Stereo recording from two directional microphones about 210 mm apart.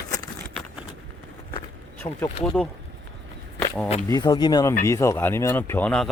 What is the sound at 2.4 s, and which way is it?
Speech, 5° left (ahead or behind).